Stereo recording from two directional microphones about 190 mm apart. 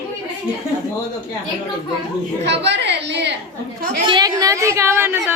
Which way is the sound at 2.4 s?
65° right (ahead or behind).